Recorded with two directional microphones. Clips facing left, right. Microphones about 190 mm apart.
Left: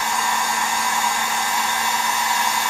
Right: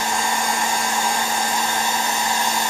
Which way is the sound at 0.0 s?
30° right (ahead or behind).